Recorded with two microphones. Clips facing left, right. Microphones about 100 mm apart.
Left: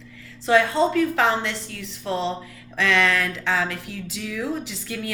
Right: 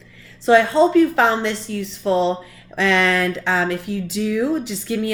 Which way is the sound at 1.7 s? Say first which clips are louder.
Right 8 dB; 30° right (ahead or behind).